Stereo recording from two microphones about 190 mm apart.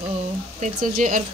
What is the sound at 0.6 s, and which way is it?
Speech, 45° right (ahead or behind).